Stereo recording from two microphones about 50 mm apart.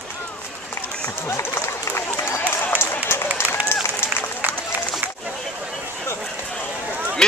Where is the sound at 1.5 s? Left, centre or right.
Left.